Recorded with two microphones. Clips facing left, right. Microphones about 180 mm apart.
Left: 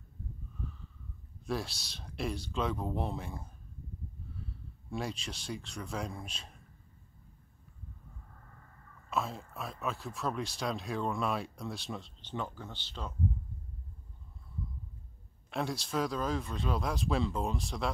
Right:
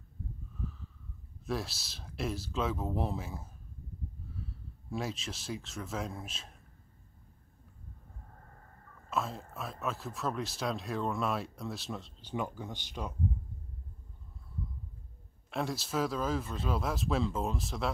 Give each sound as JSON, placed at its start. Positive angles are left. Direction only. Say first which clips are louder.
{"t": 0.6, "sound": "snort", "louder": "right 3 dB", "side_deg": 0}
{"t": 1.4, "sound": "speech", "louder": "even", "side_deg": 0}
{"t": 8.3, "sound": "a sound", "louder": "right 2 dB", "side_deg": -40}
{"t": 9.1, "sound": "speech", "louder": "even", "side_deg": 0}
{"t": 12.3, "sound": "speech", "louder": "right 3 dB", "side_deg": -15}
{"t": 15.5, "sound": "speech", "louder": "even", "side_deg": 0}